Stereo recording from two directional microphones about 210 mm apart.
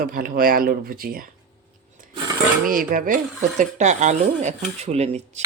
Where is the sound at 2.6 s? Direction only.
40° right (ahead or behind).